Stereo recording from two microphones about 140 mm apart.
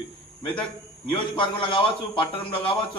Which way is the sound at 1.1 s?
35° left (ahead or behind).